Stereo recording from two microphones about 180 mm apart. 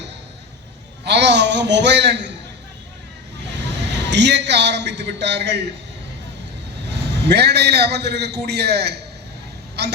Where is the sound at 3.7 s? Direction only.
75° right (ahead or behind).